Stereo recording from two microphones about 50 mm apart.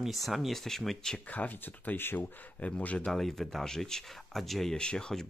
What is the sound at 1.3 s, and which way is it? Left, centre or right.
Speech, left.